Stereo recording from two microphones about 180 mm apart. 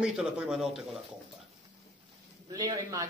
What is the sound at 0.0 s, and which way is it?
Speech, 5° right (ahead or behind).